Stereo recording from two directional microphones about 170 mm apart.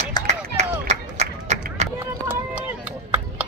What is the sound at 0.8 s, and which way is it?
Crowd, 40° right (ahead or behind).